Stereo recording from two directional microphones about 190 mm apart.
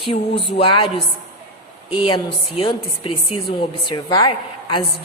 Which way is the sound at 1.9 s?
25° left (ahead or behind).